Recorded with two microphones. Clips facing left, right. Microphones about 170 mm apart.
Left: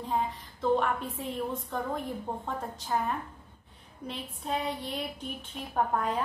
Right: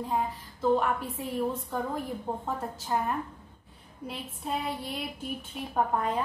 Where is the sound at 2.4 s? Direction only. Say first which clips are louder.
Right 2 dB; 5° right (ahead or behind).